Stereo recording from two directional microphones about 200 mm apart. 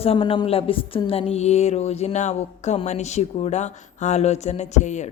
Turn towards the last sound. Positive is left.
turn(degrees=35)  # may be behind; listen again after turning